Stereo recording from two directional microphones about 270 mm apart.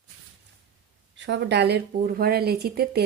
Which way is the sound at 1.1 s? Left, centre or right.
Right.